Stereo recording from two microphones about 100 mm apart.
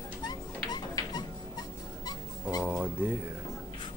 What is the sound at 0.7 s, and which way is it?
Music, 45° left (ahead or behind).